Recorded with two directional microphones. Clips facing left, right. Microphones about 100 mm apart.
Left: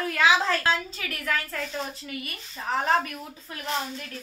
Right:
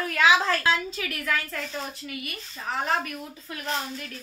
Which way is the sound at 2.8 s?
35° left (ahead or behind).